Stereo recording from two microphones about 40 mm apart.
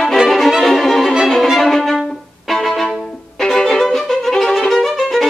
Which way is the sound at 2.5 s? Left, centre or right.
Centre.